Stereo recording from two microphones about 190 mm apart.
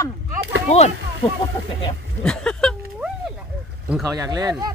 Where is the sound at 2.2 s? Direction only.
5° left (ahead or behind).